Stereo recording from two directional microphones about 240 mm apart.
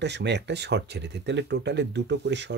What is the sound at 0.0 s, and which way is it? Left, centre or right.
Speech, right.